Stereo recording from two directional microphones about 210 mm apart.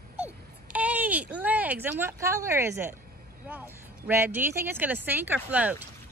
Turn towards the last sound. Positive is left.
turn(degrees=-5)  # may be behind; listen again after turning